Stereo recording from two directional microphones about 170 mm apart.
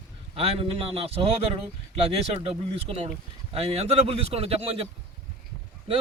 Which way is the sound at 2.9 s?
35° right (ahead or behind).